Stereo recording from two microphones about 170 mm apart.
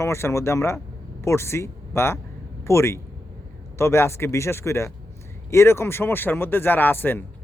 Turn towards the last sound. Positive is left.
turn(degrees=10)  # may be behind; listen again after turning